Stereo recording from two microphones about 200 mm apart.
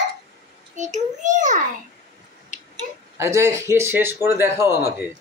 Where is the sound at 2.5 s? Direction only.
40° left (ahead or behind).